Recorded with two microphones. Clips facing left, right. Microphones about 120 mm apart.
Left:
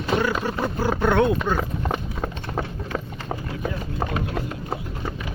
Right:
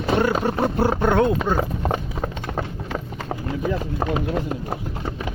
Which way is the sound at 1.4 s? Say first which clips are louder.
Right 2 dB; 20° right (ahead or behind).